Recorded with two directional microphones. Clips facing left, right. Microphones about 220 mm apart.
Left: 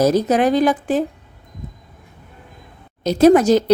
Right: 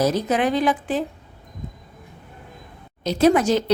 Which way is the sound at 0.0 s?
40° left (ahead or behind).